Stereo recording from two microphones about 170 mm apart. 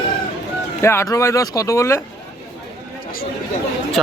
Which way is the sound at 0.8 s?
15° left (ahead or behind).